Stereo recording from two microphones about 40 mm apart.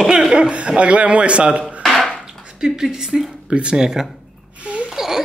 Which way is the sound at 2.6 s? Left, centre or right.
Centre.